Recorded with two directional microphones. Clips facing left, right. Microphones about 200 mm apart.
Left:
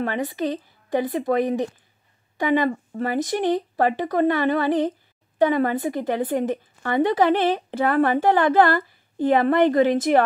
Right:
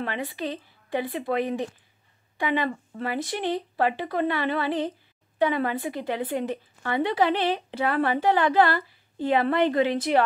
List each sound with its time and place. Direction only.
0.0 s a woman's voice: 45° left (ahead or behind)